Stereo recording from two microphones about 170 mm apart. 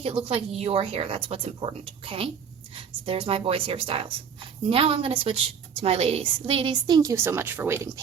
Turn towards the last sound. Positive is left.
turn(degrees=-15)  # may be behind; listen again after turning